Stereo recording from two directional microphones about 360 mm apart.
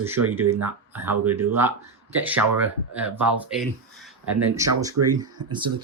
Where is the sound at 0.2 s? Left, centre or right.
Right.